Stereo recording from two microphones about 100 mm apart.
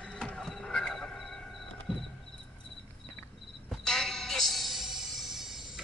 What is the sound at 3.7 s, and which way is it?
Music, 5° left (ahead or behind).